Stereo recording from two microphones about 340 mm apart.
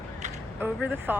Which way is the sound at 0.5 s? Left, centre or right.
Centre.